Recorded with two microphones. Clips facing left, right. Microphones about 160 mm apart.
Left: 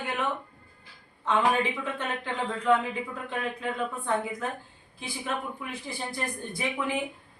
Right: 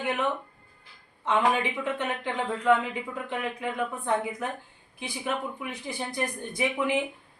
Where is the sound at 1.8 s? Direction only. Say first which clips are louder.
Right 3 dB; 15° right (ahead or behind).